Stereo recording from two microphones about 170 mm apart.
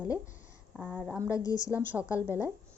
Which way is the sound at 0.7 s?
10° right (ahead or behind).